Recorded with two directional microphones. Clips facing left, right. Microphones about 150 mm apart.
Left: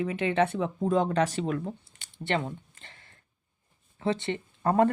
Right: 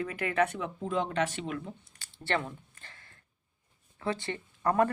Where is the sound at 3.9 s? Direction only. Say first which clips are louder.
Left 5 dB; 25° left (ahead or behind).